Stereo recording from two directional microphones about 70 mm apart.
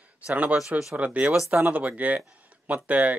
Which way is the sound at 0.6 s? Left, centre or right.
Centre.